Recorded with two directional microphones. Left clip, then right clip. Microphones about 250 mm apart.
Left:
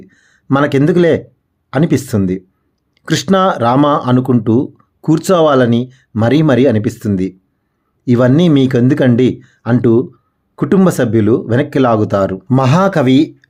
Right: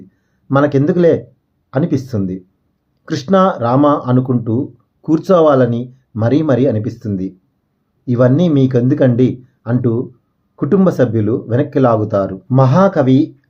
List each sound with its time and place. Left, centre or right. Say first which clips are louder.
0.1 s speech: even; left